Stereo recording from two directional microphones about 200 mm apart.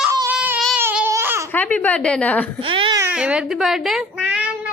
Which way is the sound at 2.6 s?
25° right (ahead or behind).